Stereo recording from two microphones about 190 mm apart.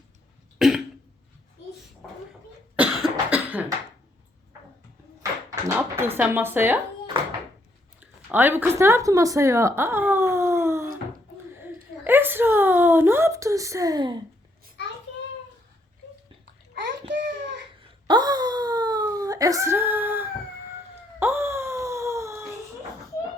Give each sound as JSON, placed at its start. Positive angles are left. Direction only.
{"t": 0.6, "sound": "cough", "side_deg": 0}
{"t": 2.7, "sound": "cough", "side_deg": -10}
{"t": 5.6, "sound": "speech", "side_deg": -10}
{"t": 7.1, "sound": "speech", "side_deg": -25}
{"t": 8.3, "sound": "speech", "side_deg": -10}
{"t": 16.7, "sound": "a sound", "side_deg": -70}
{"t": 18.1, "sound": "wail", "side_deg": -20}